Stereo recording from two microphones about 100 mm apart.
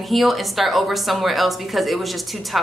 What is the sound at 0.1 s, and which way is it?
A woman's voice, centre (ahead or behind).